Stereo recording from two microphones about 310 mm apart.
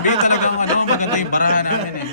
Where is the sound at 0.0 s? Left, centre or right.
Left.